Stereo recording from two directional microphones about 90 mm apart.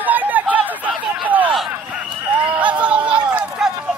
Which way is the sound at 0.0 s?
20° right (ahead or behind).